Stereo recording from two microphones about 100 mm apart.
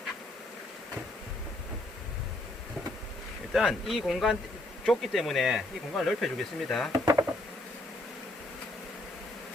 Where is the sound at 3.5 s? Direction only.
5° right (ahead or behind).